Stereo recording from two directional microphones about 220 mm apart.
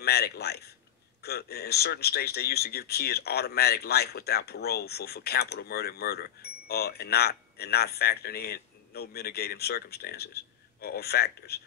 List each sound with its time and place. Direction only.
0.0 s speech: 45° left (ahead or behind)